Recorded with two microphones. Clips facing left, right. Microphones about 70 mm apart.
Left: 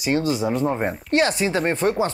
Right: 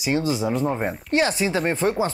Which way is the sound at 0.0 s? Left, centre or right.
Centre.